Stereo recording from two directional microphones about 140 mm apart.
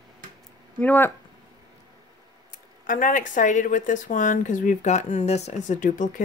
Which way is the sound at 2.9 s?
70° left (ahead or behind).